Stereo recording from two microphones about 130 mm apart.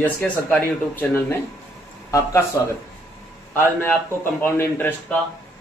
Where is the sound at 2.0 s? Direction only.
25° left (ahead or behind).